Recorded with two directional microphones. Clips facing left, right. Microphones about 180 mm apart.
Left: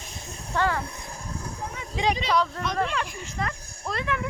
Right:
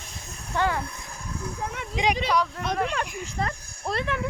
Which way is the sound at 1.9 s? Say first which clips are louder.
Even; 15° right (ahead or behind).